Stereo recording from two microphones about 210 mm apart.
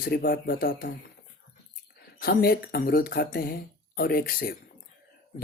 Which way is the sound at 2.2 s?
45° left (ahead or behind).